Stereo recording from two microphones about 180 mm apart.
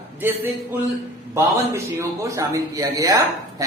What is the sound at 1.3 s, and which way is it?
A man's voice, 15° right (ahead or behind).